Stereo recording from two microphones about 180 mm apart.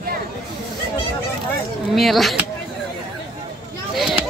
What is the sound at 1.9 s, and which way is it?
Speech, centre (ahead or behind).